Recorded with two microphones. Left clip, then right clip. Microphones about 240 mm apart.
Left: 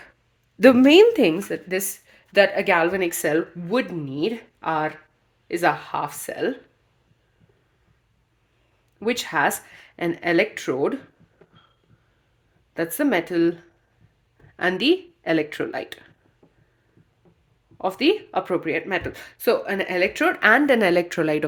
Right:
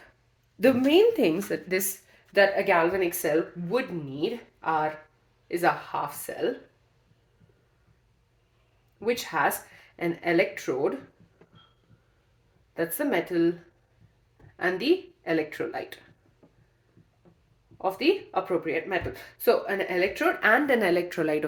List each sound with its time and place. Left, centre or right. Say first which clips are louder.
0.6 s a woman's voice: left 7 dB; left
1.2 s a woman's voice: left 5 dB; centre
2.3 s speech: left 4 dB; left
9.0 s speech: left 4 dB; left
12.7 s speech: left 5 dB; left
14.5 s speech: left 5 dB; left
16.4 s a sound: left 2 dB; centre
17.7 s speech: left 4 dB; left